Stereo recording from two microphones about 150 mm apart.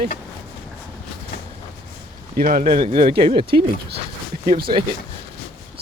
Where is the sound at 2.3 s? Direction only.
75° right (ahead or behind).